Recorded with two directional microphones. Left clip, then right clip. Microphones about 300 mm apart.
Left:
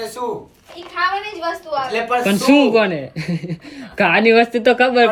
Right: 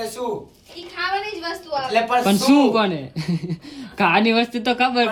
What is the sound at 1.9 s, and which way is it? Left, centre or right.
Speech, centre.